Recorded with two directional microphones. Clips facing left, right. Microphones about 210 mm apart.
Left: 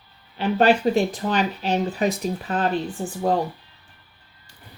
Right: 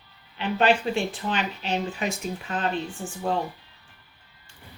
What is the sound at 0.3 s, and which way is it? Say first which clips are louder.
Speech: left 4 dB; 40° left (ahead or behind).